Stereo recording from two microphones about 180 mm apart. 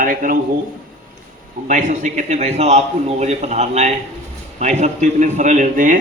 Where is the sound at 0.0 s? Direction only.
50° right (ahead or behind).